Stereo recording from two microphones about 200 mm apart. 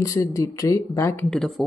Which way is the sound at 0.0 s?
15° left (ahead or behind).